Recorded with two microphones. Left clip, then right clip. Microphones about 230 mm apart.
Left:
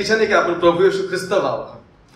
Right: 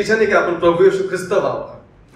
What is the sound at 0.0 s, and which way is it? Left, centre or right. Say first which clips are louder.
A man's voice: right 1 dB; left.